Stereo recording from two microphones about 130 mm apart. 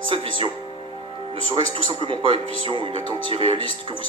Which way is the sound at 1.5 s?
40° right (ahead or behind).